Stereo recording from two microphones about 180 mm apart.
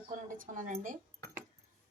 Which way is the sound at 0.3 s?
45° right (ahead or behind).